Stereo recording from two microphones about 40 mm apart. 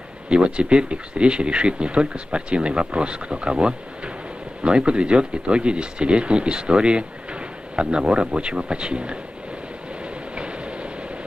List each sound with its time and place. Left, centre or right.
0.3 s speech: right
10.0 s train: right